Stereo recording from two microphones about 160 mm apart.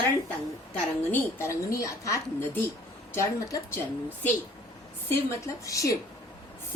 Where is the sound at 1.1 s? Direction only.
15° left (ahead or behind).